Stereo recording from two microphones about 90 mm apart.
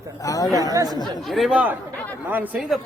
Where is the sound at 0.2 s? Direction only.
40° left (ahead or behind).